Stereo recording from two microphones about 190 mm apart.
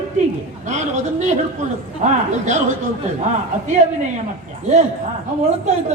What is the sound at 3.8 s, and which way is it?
Speech, 40° right (ahead or behind).